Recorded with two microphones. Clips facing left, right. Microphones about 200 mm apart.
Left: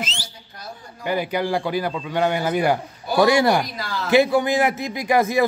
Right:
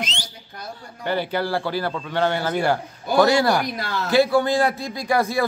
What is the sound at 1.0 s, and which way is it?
A man's voice, 10° left (ahead or behind).